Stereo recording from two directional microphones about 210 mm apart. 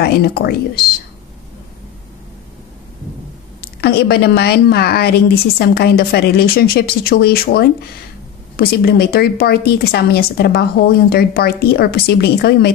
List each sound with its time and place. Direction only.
0.0 s speech: 50° left (ahead or behind)
3.6 s speech: 50° left (ahead or behind)